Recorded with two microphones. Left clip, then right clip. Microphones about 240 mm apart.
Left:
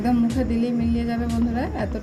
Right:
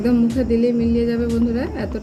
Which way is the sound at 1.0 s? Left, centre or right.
Centre.